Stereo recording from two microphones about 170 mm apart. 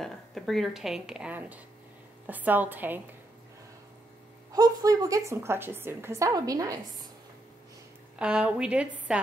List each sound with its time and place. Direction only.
0.0 s a woman's voice: centre (ahead or behind)
4.5 s a woman's voice: 20° right (ahead or behind)
8.2 s a woman's voice: 5° right (ahead or behind)